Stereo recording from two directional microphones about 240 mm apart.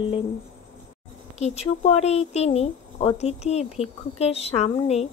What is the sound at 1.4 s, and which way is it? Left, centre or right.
Speech, left.